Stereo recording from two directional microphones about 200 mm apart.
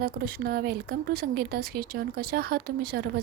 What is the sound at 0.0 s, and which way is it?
Speech, 50° right (ahead or behind).